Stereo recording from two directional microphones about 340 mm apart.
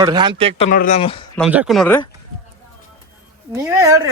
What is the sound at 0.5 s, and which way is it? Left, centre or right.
Speech, left.